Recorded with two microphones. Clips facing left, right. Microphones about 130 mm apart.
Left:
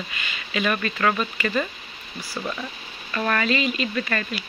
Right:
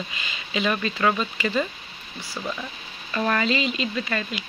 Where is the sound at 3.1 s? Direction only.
20° right (ahead or behind).